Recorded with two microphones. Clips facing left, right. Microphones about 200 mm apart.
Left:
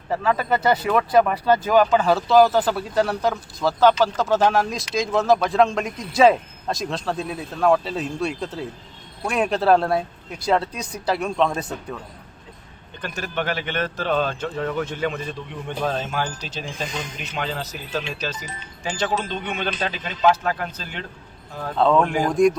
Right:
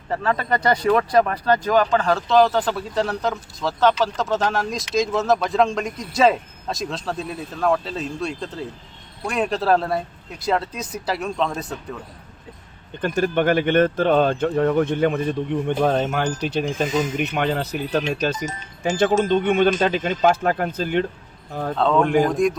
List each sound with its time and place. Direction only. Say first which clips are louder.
0.1 s speech: left 1 dB; 5° left (ahead or behind)
13.0 s speech: right 8 dB; 50° right (ahead or behind)
16.6 s speech: right 7 dB; 45° right (ahead or behind)
21.8 s speech: right 1 dB; centre (ahead or behind)